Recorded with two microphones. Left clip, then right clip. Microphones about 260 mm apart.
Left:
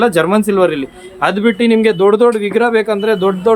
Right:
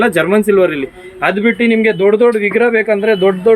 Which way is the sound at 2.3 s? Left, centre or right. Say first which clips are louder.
Right 1 dB; centre.